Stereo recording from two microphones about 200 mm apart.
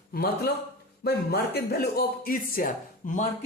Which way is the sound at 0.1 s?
50° left (ahead or behind).